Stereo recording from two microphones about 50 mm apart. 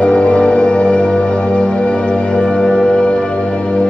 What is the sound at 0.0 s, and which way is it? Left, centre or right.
Music, left.